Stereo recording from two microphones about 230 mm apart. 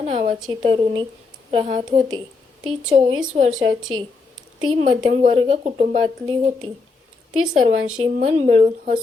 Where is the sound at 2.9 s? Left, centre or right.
Right.